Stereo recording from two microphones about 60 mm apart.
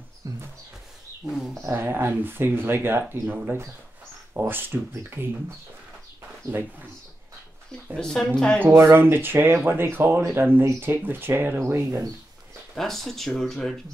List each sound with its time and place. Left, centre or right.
0.2 s a sound: right
1.7 s speech: right
8.0 s speech: centre
8.7 s speech: right
12.7 s speech: centre